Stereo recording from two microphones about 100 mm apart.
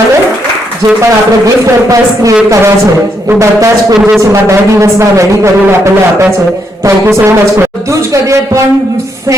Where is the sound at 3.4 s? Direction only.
30° right (ahead or behind).